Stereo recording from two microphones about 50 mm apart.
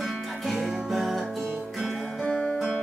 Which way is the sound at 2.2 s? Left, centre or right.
Centre.